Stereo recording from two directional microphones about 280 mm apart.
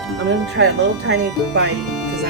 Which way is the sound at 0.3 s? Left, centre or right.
Right.